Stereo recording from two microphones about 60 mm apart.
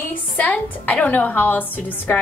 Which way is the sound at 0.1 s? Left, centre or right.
Left.